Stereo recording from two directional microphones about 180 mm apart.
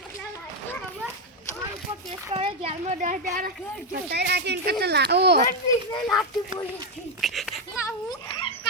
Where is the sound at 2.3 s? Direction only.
35° right (ahead or behind).